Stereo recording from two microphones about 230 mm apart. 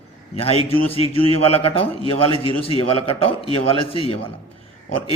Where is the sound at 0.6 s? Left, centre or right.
Left.